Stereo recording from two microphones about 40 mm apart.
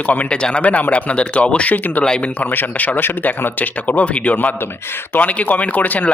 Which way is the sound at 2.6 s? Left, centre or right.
Left.